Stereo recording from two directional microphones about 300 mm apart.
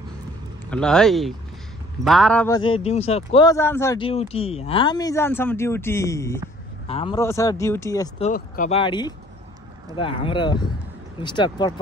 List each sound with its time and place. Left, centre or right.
0.7 s speech: centre
8.3 s speech: left